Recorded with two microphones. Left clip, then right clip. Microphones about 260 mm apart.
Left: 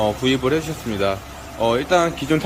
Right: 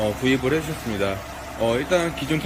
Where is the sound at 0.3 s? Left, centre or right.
Centre.